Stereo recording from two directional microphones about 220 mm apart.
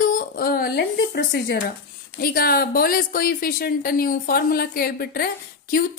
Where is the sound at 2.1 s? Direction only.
40° left (ahead or behind).